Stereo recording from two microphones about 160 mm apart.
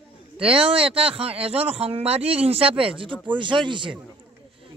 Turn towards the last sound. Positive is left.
turn(degrees=-30)  # may be behind; listen again after turning